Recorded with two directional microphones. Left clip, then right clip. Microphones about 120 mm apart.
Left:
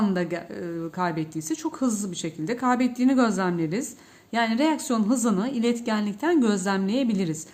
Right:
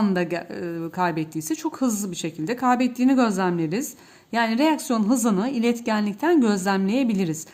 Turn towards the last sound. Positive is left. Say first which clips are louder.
# right 2 dB
turn(degrees=-40)  # may be behind; listen again after turning